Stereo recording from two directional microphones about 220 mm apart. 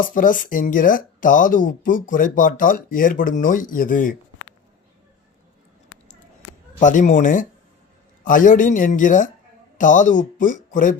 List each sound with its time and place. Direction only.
0.0 s speech: 40° left (ahead or behind)
6.7 s speech: 35° left (ahead or behind)